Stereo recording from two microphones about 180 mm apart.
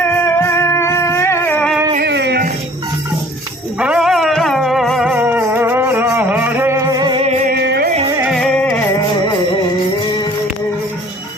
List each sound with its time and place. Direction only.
0.3 s music: 15° left (ahead or behind)
2.0 s music: 70° right (ahead or behind)
3.8 s music: 5° right (ahead or behind); by 7.3 s 25° right (ahead or behind)
7.3 s music: 40° right (ahead or behind)
7.5 s music: 65° right (ahead or behind)
8.2 s music: centre (ahead or behind)